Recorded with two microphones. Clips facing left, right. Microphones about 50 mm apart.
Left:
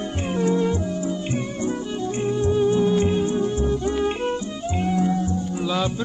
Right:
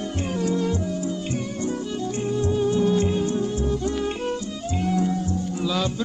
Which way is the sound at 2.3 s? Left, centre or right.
Left.